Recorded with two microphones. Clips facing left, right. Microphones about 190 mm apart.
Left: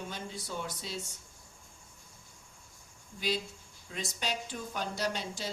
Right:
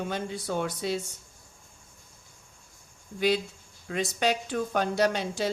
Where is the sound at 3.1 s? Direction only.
65° right (ahead or behind).